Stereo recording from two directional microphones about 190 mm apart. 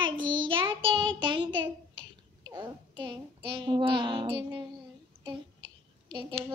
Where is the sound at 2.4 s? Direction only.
25° right (ahead or behind).